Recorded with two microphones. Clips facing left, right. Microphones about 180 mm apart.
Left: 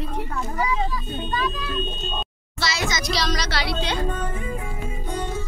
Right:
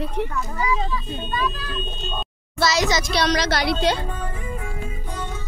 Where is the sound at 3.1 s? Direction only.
60° right (ahead or behind).